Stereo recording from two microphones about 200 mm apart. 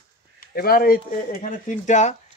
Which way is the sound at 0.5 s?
50° left (ahead or behind).